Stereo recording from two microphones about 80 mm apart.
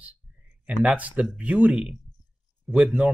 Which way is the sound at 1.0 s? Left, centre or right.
Centre.